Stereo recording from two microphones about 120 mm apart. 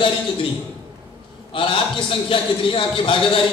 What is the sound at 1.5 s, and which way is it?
A man's voice, 45° left (ahead or behind).